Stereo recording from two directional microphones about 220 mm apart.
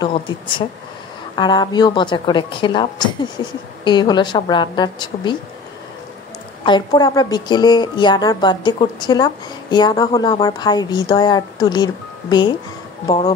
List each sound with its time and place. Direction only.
0.0 s a woman's voice: 20° left (ahead or behind)
6.6 s a woman's voice: 20° left (ahead or behind)